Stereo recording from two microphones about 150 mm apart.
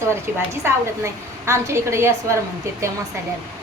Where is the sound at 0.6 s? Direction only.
15° right (ahead or behind).